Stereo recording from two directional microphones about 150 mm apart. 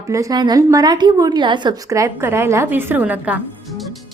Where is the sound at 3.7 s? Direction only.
Centre (ahead or behind).